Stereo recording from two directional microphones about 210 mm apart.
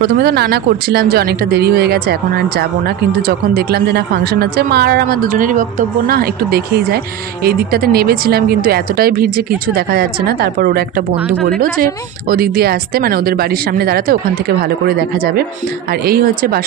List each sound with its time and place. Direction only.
0.0 s speech: 45° right (ahead or behind)